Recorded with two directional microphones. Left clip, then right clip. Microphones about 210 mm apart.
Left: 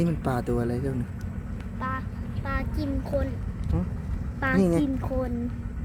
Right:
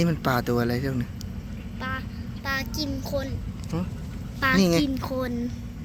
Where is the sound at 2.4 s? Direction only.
30° left (ahead or behind).